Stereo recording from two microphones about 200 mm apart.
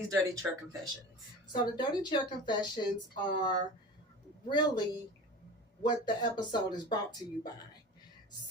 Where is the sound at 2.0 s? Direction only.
20° left (ahead or behind).